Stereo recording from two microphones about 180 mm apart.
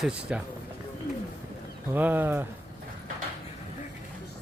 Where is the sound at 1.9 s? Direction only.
10° right (ahead or behind).